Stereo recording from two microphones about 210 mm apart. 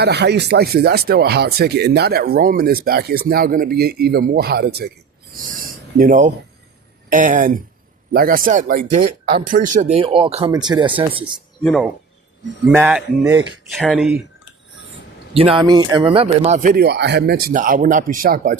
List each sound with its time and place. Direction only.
0.0 s speech: 50° right (ahead or behind)
6.0 s speech: 35° right (ahead or behind)
11.6 s speech: centre (ahead or behind)
12.6 s speech: 10° right (ahead or behind)
15.3 s speech: 25° right (ahead or behind)
16.7 s speech: 50° right (ahead or behind)